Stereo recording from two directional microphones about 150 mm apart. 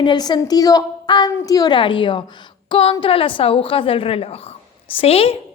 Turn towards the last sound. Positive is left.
turn(degrees=40)  # may be behind; listen again after turning